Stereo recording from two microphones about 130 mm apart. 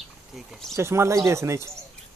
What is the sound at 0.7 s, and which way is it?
Speech, 20° right (ahead or behind).